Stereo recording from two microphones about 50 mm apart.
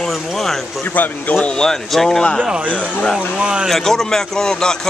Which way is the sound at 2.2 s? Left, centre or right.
Centre.